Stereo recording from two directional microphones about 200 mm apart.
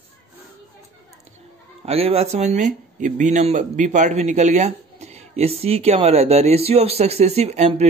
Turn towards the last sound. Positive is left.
turn(degrees=-35)  # may be behind; listen again after turning